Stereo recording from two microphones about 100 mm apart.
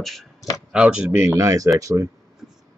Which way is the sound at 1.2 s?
30° right (ahead or behind).